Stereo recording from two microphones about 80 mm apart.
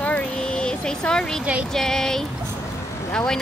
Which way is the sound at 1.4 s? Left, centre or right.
Centre.